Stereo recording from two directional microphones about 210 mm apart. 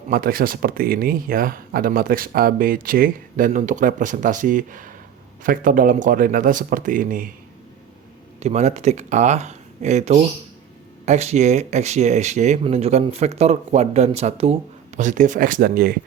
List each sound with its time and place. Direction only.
0.1 s speech: 45° right (ahead or behind)
8.4 s speech: 30° right (ahead or behind)